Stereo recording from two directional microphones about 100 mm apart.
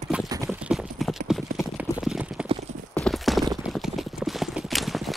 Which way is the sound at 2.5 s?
90° right.